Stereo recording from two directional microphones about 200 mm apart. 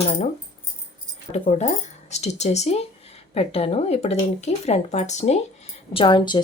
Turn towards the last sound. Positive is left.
turn(degrees=20)  # may be behind; listen again after turning